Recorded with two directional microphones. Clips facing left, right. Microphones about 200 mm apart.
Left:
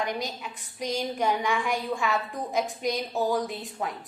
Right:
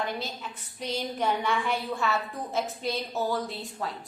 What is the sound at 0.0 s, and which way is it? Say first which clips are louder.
A woman's voice: left 2 dB; 15° left (ahead or behind).